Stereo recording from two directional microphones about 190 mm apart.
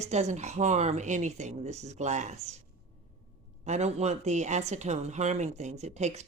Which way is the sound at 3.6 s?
35° right (ahead or behind).